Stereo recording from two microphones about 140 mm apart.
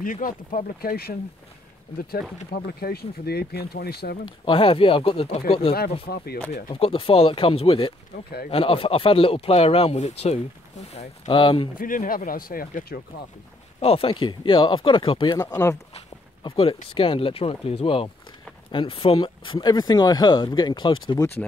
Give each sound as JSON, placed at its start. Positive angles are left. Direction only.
{"t": 0.0, "sound": "speech", "side_deg": 75}
{"t": 4.0, "sound": "speech", "side_deg": 90}
{"t": 4.5, "sound": "speech", "side_deg": 40}
{"t": 11.2, "sound": "speech", "side_deg": 35}
{"t": 11.8, "sound": "speech", "side_deg": 80}
{"t": 13.7, "sound": "speech", "side_deg": 45}
{"t": 15.3, "sound": "speech", "side_deg": 20}
{"t": 16.4, "sound": "speech", "side_deg": 40}